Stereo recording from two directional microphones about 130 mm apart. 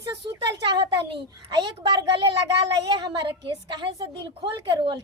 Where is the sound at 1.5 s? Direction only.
35° right (ahead or behind).